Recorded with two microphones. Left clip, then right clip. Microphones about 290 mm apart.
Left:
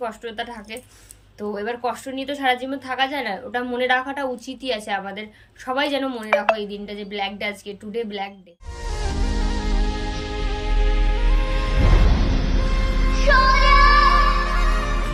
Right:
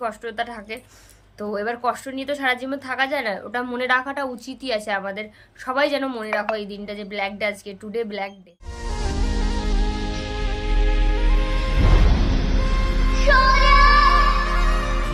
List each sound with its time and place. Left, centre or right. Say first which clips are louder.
0.0 s a woman's voice: right 2 dB; centre
6.3 s a woman's voice: left 6 dB; left
6.6 s a woman's voice: left 1 dB; centre
8.8 s music: even; centre